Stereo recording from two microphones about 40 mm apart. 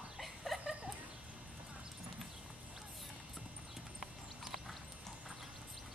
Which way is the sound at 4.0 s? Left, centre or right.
Centre.